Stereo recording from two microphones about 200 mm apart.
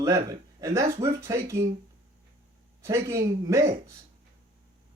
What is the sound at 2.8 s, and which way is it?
Speech, 15° right (ahead or behind).